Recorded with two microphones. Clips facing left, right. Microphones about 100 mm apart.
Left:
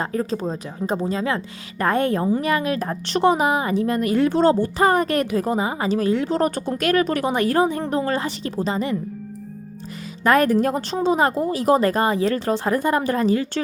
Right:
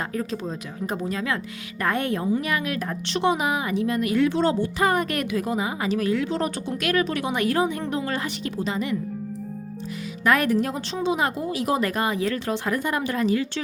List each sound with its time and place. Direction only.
0.0 s a woman's voice: 35° left (ahead or behind)
10.2 s a woman's voice: 40° left (ahead or behind)